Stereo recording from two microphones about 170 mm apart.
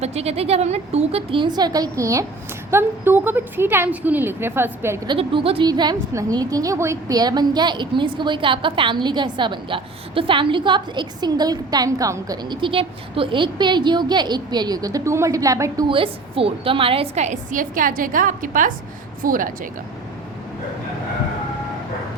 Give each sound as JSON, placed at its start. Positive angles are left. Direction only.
{"t": 0.0, "sound": "a woman's voice", "side_deg": -40}
{"t": 5.0, "sound": "a woman's voice", "side_deg": -30}